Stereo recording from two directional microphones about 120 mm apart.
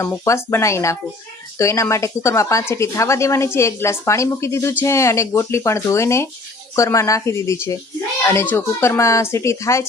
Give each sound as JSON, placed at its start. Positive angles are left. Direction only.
{"t": 0.0, "sound": "speech", "side_deg": 20}